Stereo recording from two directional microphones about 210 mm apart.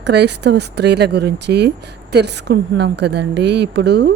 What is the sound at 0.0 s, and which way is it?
Speech, 55° right (ahead or behind).